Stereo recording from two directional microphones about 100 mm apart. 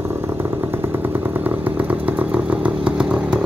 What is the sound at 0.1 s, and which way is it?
Motorcycle, 20° right (ahead or behind).